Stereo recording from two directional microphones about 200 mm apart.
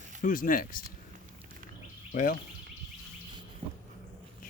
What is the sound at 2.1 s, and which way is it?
Speech, 40° left (ahead or behind).